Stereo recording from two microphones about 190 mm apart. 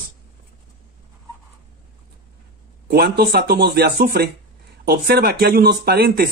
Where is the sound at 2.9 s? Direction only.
55° right (ahead or behind).